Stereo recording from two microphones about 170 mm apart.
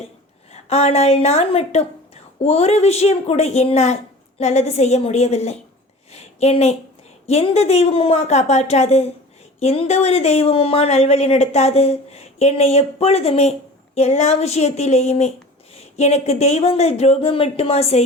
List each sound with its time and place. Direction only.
0.5 s a woman's voice: 40° left (ahead or behind)